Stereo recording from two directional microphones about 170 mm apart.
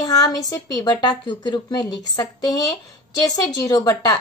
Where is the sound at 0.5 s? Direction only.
20° left (ahead or behind).